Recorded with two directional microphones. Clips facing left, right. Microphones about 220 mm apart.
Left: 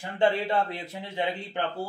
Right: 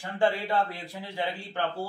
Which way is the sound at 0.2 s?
20° left (ahead or behind).